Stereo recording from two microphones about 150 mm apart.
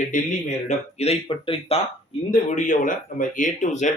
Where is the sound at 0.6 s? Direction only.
45° left (ahead or behind).